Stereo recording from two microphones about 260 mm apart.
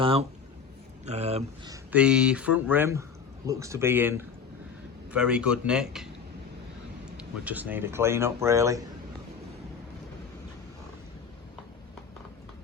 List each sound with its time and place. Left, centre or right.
0.0 s speech: right
1.7 s speech: centre
7.2 s speech: centre